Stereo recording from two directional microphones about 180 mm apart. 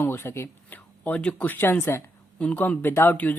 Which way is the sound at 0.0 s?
15° left (ahead or behind).